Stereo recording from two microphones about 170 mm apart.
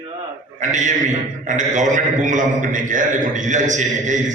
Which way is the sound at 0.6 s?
45° right (ahead or behind).